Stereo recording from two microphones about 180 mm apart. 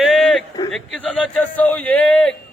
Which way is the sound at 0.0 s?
Centre (ahead or behind).